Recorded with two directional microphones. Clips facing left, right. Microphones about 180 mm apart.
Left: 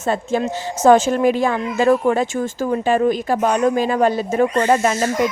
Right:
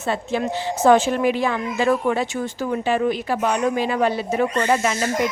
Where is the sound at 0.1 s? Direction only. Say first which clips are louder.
Left 3 dB; 45° left (ahead or behind).